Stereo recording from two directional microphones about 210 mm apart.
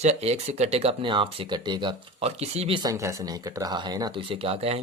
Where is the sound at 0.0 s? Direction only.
30° right (ahead or behind).